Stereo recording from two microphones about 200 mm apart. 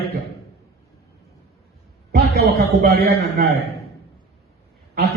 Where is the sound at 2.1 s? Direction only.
55° right (ahead or behind).